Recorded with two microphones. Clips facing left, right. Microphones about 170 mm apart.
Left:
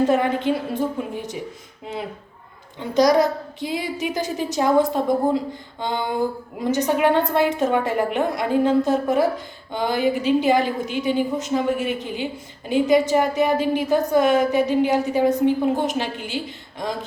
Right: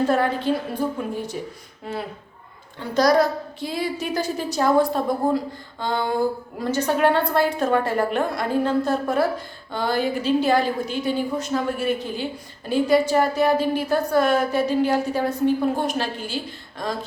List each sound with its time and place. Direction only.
0.0 s a woman's voice: 20° left (ahead or behind)
2.7 s a woman's voice: 20° left (ahead or behind)